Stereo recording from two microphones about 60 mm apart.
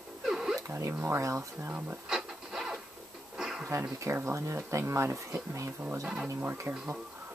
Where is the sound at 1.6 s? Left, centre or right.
Right.